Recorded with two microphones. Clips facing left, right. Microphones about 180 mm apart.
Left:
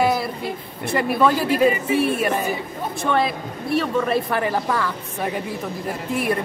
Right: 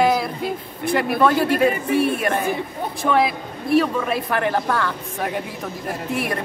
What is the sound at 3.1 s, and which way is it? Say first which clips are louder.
Speech: right 2 dB; 5° right (ahead or behind).